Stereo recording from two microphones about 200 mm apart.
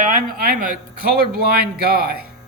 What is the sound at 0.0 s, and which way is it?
Speech, 45° right (ahead or behind).